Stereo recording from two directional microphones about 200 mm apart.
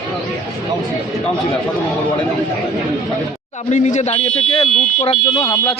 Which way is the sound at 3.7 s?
35° left (ahead or behind).